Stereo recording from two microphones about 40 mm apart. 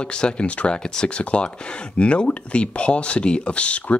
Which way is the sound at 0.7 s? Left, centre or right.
Centre.